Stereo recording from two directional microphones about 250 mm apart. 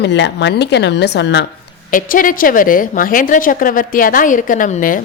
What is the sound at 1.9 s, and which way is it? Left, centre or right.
A woman's voice, left.